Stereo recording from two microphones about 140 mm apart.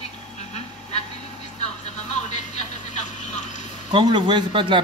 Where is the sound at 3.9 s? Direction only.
35° right (ahead or behind).